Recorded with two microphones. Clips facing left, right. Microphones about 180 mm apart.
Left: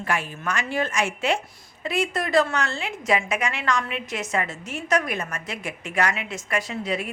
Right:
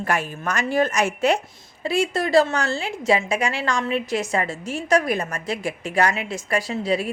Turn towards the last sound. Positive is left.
turn(degrees=-35)  # may be behind; listen again after turning